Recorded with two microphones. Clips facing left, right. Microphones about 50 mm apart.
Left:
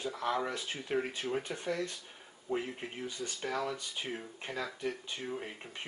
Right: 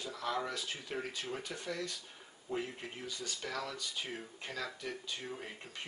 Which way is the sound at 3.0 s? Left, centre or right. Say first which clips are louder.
Left 4 dB; left.